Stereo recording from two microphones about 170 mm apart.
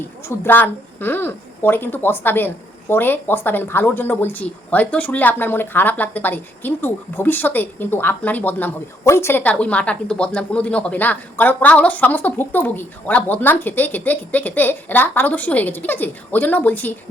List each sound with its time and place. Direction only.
0.3 s speech: 10° left (ahead or behind)